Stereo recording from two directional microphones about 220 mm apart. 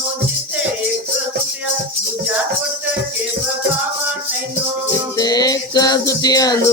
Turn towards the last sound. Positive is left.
turn(degrees=15)  # may be behind; listen again after turning